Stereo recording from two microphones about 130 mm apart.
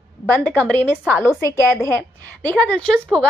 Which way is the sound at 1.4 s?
20° left (ahead or behind).